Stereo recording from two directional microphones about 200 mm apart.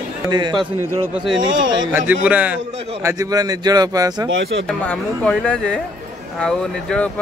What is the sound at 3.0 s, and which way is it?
Speech, 15° right (ahead or behind).